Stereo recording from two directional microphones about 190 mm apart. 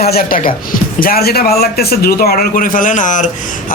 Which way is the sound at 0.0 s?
55° left (ahead or behind).